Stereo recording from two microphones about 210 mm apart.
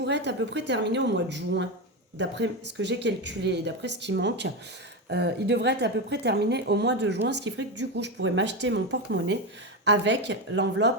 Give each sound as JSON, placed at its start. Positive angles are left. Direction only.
{"t": 0.0, "sound": "a woman's voice", "side_deg": -55}